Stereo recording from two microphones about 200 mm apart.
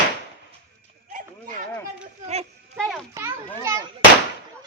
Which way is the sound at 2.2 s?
30° right (ahead or behind).